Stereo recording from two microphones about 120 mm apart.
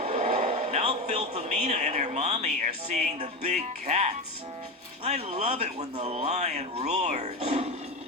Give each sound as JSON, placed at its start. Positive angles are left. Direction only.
{"t": 0.0, "sound": "a man's voice", "side_deg": -65}